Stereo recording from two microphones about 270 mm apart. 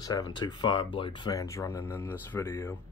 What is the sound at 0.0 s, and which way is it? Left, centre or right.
Speech, centre.